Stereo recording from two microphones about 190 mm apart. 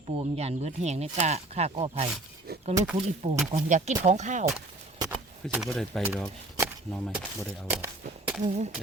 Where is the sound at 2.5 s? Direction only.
55° right (ahead or behind).